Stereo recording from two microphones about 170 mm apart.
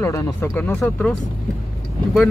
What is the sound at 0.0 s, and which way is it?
Speech, 20° left (ahead or behind).